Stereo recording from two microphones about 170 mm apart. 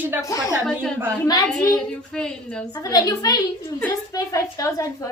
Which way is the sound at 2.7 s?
20° left (ahead or behind).